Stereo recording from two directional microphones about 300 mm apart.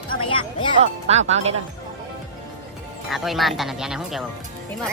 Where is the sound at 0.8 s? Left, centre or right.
Right.